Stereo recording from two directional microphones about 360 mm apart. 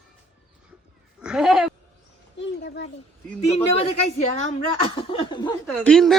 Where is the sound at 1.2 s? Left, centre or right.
Centre.